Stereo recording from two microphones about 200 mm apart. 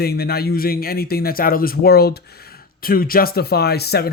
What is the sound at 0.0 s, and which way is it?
Speech, 50° left (ahead or behind).